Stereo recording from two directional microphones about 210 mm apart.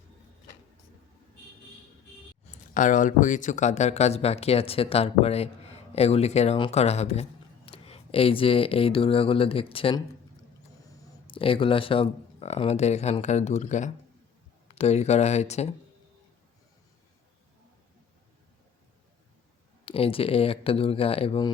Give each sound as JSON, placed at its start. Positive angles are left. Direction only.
{"t": 2.7, "sound": "speech", "side_deg": 40}
{"t": 11.3, "sound": "speech", "side_deg": 25}
{"t": 19.8, "sound": "speech", "side_deg": 25}